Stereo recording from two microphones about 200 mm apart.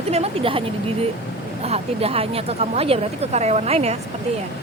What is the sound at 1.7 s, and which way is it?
Speech, 30° right (ahead or behind).